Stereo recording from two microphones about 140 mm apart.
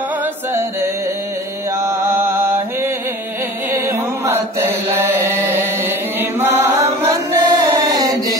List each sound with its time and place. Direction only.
0.2 s music: 20° right (ahead or behind)
1.8 s mantra: 20° right (ahead or behind)
3.7 s chant: 15° right (ahead or behind)